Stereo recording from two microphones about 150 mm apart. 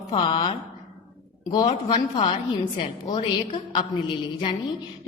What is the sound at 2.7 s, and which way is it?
A woman's voice, 35° left (ahead or behind).